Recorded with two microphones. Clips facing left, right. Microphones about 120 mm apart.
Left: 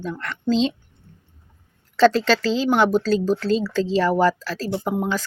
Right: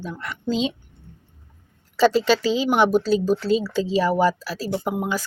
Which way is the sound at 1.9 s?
5° right (ahead or behind).